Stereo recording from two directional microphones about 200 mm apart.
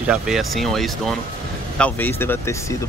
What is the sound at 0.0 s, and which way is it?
Speech, 5° right (ahead or behind).